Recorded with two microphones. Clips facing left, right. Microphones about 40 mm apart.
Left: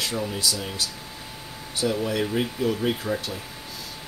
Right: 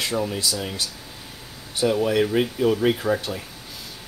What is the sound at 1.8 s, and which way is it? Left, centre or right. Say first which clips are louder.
Speech: right 5 dB; centre.